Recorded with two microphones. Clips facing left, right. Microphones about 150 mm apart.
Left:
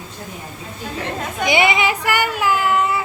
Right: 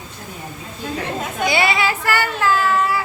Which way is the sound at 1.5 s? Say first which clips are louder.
Left 2 dB; 20° left (ahead or behind).